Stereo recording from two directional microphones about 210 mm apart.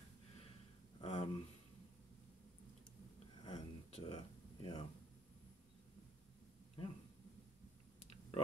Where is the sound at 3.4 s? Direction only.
25° left (ahead or behind).